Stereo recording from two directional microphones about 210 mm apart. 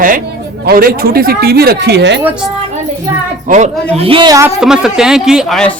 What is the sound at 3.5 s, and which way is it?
Speech, 35° right (ahead or behind).